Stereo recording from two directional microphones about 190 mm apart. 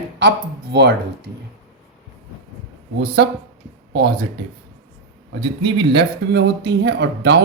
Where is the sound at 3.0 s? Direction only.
60° right (ahead or behind).